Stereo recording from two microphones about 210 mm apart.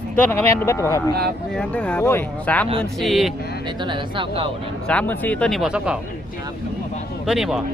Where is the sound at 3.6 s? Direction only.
20° right (ahead or behind).